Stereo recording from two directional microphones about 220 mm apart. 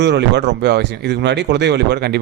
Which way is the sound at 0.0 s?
50° right (ahead or behind).